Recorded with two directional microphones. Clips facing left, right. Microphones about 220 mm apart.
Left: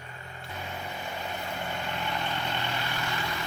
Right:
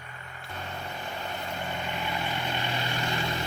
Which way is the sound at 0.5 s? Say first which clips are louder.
Even; 5° left (ahead or behind).